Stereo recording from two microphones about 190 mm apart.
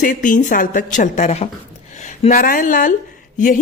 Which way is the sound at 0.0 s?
45° left (ahead or behind).